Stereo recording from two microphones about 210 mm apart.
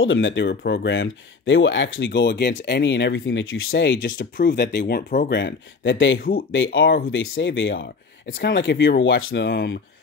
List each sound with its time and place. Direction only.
0.0 s speech: 65° left (ahead or behind); by 5.3 s 45° left (ahead or behind)
5.3 s speech: 60° left (ahead or behind); by 6.6 s 45° left (ahead or behind)
6.6 s speech: 65° left (ahead or behind)